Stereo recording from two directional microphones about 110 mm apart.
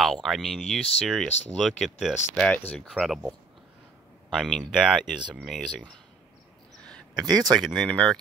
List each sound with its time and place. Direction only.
0.0 s speech: centre (ahead or behind)
2.4 s speech: 15° left (ahead or behind)
2.9 s speech: centre (ahead or behind)
4.4 s speech: centre (ahead or behind)
6.8 s a sound: 5° left (ahead or behind)
7.2 s speech: 40° right (ahead or behind)
7.6 s speech: centre (ahead or behind)